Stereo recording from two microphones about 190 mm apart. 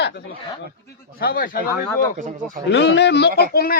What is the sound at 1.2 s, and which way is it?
Speech, 50° left (ahead or behind).